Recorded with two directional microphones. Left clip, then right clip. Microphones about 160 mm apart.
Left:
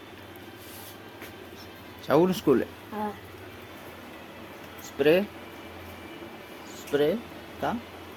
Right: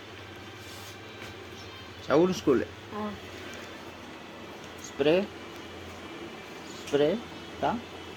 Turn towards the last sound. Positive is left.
turn(degrees=5)  # may be behind; listen again after turning